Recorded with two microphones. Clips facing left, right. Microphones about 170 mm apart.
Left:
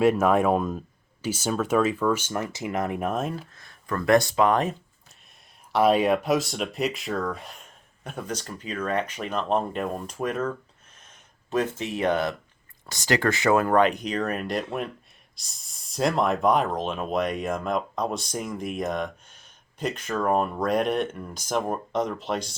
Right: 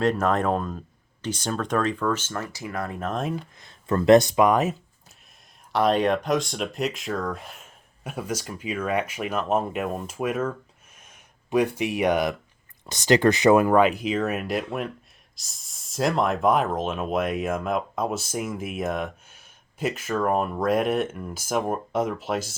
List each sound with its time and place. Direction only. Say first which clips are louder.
0.0 s speech: left 3 dB; 10° left (ahead or behind)
3.1 s speech: even; 5° left (ahead or behind)
3.5 s speech: right 5 dB; 20° right (ahead or behind)
5.7 s speech: left 1 dB; 5° left (ahead or behind)
10.9 s a sound: right 1 dB; 10° right (ahead or behind)
12.8 s speech: right 5 dB; 20° right (ahead or behind)
13.7 s speech: right 2 dB; 5° right (ahead or behind)